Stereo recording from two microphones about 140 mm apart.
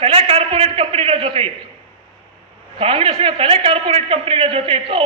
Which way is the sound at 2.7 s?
40° right (ahead or behind).